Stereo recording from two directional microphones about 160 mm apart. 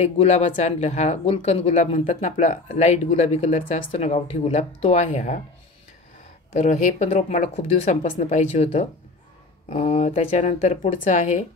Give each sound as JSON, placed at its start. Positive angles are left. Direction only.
{"t": 0.0, "sound": "speech", "side_deg": 45}
{"t": 6.5, "sound": "speech", "side_deg": 45}